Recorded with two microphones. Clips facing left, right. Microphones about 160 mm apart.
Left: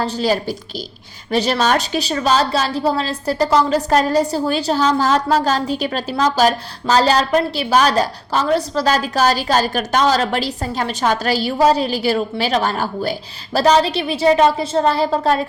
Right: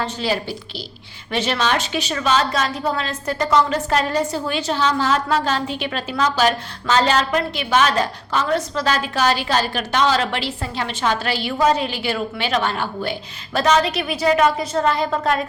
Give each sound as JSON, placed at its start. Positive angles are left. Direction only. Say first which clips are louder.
{"t": 0.0, "sound": "a woman's voice", "louder": "left 4 dB", "side_deg": 40}